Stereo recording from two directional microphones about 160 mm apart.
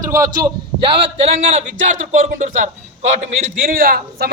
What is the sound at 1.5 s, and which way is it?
A man's voice, 50° right (ahead or behind).